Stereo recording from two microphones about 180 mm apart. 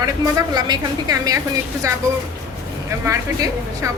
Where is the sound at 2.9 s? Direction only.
15° right (ahead or behind).